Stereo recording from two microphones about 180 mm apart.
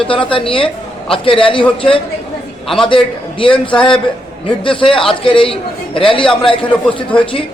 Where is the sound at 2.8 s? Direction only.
30° left (ahead or behind).